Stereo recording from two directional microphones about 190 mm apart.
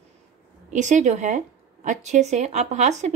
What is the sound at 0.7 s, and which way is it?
Speech, 40° right (ahead or behind).